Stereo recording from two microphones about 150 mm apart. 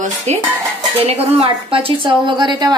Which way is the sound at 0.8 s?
40° right (ahead or behind).